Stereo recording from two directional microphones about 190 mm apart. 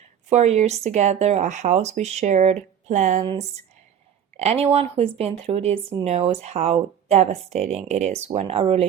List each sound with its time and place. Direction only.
0.3 s speech: 35° right (ahead or behind)
4.4 s speech: 35° right (ahead or behind)